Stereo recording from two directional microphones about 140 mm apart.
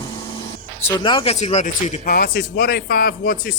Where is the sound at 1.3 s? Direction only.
50° left (ahead or behind).